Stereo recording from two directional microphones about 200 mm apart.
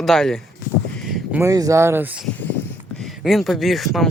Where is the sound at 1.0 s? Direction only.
Centre (ahead or behind).